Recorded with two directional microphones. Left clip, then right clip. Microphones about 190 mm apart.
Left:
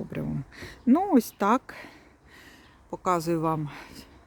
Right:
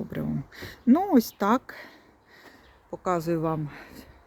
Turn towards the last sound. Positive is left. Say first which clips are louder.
# left 1 dB
turn(degrees=5)  # may be behind; listen again after turning